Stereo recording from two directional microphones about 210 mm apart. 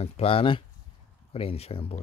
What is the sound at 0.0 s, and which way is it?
Speech, 25° left (ahead or behind).